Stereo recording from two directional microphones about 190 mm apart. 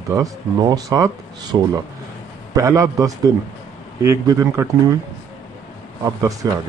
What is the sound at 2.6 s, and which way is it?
Speech, 15° right (ahead or behind).